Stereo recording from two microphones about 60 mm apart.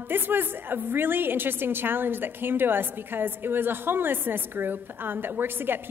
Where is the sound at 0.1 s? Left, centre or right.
Right.